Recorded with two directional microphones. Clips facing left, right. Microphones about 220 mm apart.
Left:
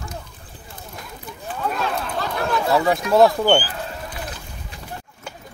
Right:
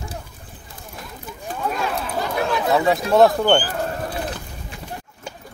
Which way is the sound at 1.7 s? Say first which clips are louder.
Even; centre (ahead or behind).